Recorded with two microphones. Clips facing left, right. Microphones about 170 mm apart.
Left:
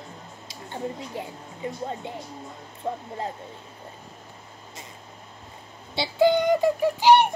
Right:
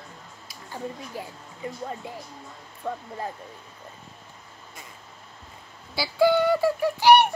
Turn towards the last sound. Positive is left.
turn(degrees=15)  # may be behind; listen again after turning